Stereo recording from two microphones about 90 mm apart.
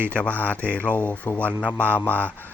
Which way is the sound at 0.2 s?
15° left (ahead or behind).